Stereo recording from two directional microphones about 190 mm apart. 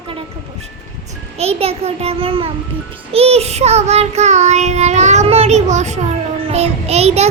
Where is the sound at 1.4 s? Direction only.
30° right (ahead or behind).